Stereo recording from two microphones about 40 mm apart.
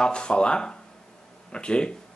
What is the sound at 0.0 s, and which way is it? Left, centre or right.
Speech, left.